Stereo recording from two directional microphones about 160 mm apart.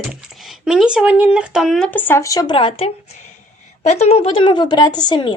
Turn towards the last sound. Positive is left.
turn(degrees=25)  # may be behind; listen again after turning